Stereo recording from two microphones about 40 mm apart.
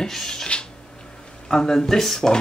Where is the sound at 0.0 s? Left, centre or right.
Centre.